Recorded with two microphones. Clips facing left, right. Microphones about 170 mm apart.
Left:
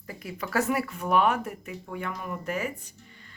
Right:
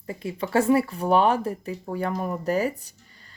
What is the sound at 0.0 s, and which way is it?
Speech, 25° right (ahead or behind).